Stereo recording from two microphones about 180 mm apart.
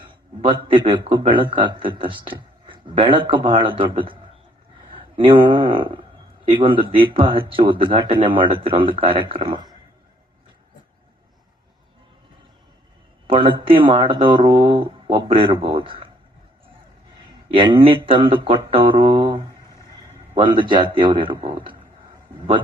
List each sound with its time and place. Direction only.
0.0 s a man's voice: 25° right (ahead or behind)
13.2 s a man's voice: 30° right (ahead or behind)
17.5 s a man's voice: 25° right (ahead or behind)